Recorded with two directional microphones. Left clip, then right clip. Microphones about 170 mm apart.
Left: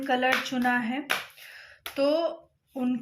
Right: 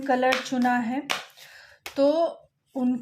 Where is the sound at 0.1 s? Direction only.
50° right (ahead or behind).